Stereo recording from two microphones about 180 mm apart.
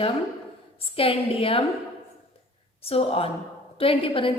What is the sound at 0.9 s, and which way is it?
Speech, 30° left (ahead or behind).